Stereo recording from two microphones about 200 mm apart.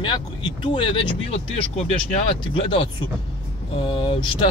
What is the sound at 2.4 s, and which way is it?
Speech, 25° left (ahead or behind).